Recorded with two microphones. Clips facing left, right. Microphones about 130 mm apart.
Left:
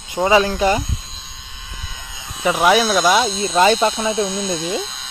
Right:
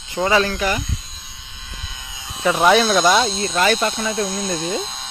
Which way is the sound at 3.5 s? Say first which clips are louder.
Left 5 dB; 25° left (ahead or behind).